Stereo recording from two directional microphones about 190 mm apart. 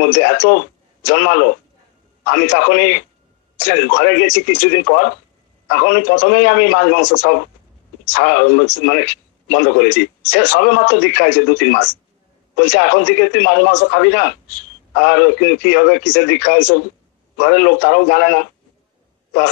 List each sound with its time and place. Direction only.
0.0 s a man's voice: 55° left (ahead or behind)